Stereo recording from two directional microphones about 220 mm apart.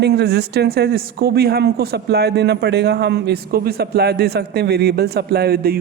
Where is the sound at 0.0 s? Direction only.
50° right (ahead or behind).